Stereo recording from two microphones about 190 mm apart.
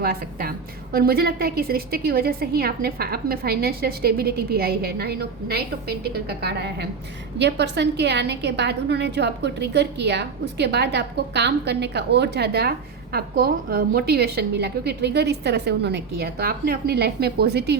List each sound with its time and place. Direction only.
0.0 s a woman's voice: 55° right (ahead or behind)